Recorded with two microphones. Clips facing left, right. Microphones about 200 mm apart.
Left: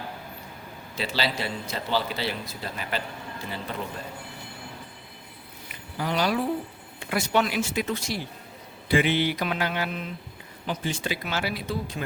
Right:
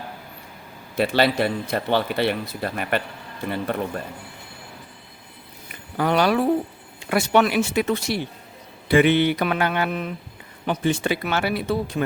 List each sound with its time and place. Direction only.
0.9 s speech: 60° right (ahead or behind)
6.0 s speech: 60° right (ahead or behind)